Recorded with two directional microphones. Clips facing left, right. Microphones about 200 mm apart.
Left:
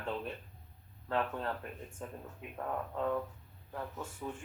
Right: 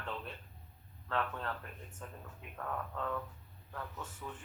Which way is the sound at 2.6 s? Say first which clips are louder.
Left 4 dB; 25° left (ahead or behind).